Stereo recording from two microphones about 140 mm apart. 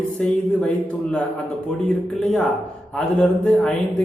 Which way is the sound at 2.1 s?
Centre (ahead or behind).